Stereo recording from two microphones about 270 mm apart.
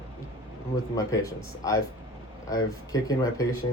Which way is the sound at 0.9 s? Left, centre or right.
Centre.